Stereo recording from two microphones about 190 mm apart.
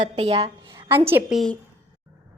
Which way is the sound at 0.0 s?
30° right (ahead or behind).